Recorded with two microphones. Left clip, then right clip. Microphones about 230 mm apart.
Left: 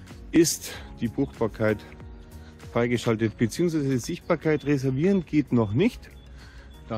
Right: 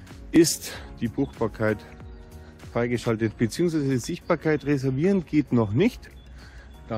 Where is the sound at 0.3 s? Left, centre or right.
Centre.